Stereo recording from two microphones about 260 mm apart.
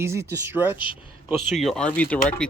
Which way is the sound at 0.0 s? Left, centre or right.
Centre.